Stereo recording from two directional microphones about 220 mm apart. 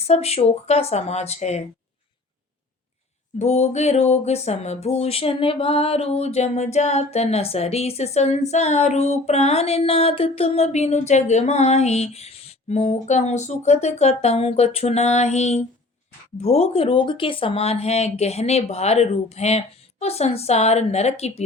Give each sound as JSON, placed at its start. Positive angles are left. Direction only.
{"t": 0.1, "sound": "speech", "side_deg": 30}
{"t": 3.3, "sound": "speech", "side_deg": 30}